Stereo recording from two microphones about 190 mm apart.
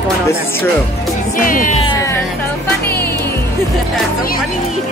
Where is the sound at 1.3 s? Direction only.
45° left (ahead or behind).